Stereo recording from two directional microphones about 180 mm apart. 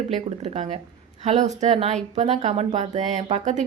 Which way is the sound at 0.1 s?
35° right (ahead or behind).